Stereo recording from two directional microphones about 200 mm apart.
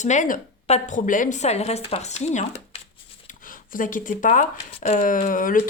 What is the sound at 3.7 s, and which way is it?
A woman's voice, 40° left (ahead or behind).